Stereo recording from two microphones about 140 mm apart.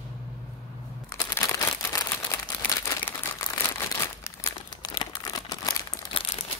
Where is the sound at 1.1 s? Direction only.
25° left (ahead or behind).